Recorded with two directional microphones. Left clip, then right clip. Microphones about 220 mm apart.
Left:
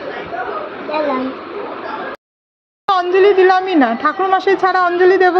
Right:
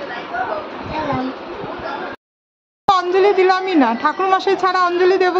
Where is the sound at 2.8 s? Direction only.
Centre (ahead or behind).